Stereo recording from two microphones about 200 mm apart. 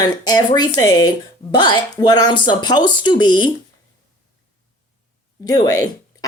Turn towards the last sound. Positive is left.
turn(degrees=20)  # may be behind; listen again after turning